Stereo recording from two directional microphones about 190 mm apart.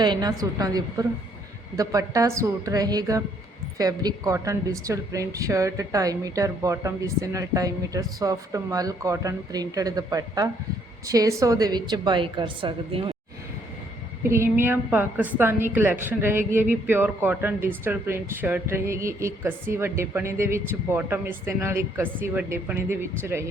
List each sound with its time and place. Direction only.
0.0 s a woman's voice: 20° right (ahead or behind)
14.3 s speech: 15° right (ahead or behind)